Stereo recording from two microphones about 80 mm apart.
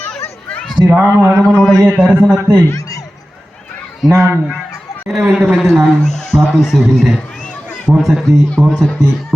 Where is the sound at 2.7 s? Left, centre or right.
Left.